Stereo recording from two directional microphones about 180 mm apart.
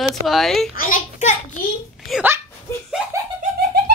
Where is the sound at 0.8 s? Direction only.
45° left (ahead or behind).